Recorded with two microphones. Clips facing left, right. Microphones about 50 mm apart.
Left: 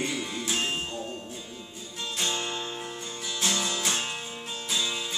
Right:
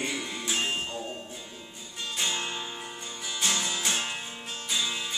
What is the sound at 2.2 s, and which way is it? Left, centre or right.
Music, centre.